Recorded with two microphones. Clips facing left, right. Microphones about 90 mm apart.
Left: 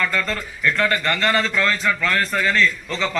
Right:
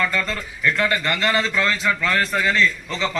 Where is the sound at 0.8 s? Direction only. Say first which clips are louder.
Left 2 dB; 15° right (ahead or behind).